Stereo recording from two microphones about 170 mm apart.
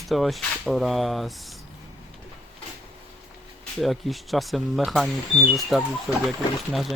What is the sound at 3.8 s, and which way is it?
Speech, centre (ahead or behind).